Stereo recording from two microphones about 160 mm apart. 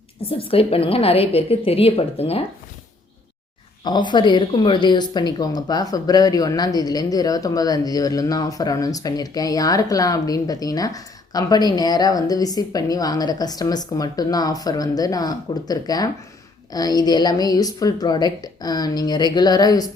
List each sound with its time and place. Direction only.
0.3 s a woman's voice: 35° left (ahead or behind)
3.8 s speech: 25° left (ahead or behind)